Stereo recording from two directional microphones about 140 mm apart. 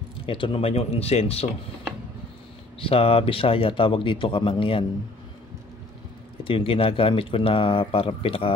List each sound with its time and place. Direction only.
0.3 s speech: 40° left (ahead or behind)
2.8 s speech: 45° left (ahead or behind)
6.4 s speech: 40° left (ahead or behind)